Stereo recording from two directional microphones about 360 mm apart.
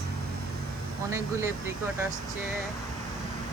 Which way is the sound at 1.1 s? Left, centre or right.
Centre.